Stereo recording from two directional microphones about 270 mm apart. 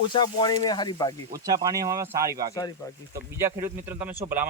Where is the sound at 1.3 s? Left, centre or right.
Centre.